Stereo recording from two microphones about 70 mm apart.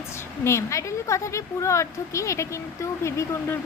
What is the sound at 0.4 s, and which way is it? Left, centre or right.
A woman's voice, left.